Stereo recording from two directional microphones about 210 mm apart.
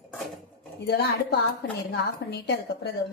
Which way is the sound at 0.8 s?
50° left (ahead or behind).